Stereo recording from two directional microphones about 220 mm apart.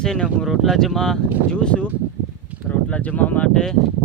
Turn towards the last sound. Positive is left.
turn(degrees=5)  # may be behind; listen again after turning